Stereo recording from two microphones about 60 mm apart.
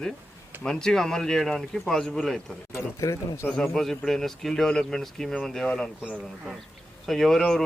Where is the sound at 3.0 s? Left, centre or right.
Left.